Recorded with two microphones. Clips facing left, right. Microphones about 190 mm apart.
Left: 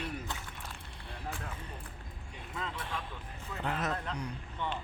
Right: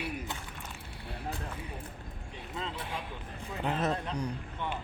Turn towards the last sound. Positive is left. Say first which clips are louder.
# right 4 dB
turn(degrees=-25)  # may be behind; listen again after turning